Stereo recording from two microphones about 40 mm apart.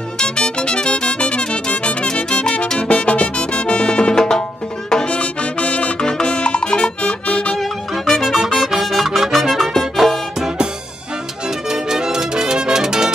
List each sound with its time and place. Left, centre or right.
0.2 s music: left
5.9 s music: centre
7.2 s music: left
7.5 s music: centre
11.7 s music: centre